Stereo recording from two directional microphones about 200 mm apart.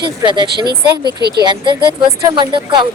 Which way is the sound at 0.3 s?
20° right (ahead or behind).